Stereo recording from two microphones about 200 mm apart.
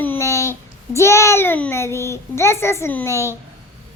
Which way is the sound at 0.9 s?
15° left (ahead or behind).